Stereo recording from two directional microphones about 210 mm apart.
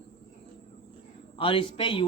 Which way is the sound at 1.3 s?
25° left (ahead or behind).